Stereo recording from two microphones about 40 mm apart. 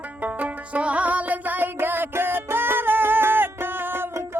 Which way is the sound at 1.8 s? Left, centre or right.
Right.